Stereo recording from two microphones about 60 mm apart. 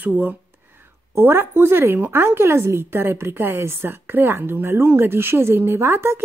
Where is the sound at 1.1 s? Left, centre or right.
Right.